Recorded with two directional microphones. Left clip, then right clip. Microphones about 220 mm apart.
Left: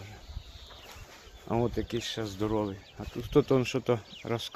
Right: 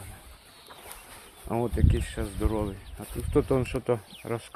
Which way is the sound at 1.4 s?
5° left (ahead or behind).